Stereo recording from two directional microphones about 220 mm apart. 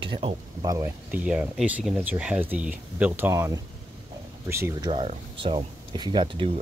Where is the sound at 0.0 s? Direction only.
25° right (ahead or behind).